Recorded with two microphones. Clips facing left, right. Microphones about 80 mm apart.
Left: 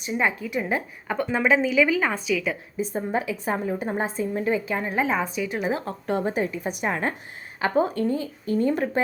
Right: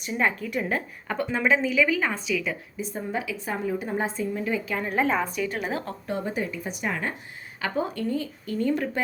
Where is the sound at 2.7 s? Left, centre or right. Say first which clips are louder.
Left 6 dB; left; by 5.9 s centre.